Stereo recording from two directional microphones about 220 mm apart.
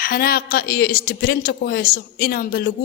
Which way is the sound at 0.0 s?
45° left (ahead or behind).